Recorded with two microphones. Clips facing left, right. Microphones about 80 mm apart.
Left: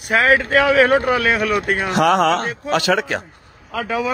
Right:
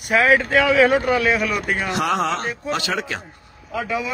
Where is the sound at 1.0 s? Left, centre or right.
Left.